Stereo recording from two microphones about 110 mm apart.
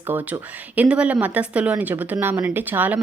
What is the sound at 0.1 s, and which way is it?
Speech, 15° right (ahead or behind).